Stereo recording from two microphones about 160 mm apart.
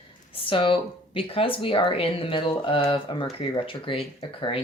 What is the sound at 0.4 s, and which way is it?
Speech, 35° left (ahead or behind).